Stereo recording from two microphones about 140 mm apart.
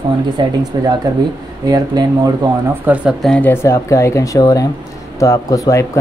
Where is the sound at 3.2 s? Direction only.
5° left (ahead or behind).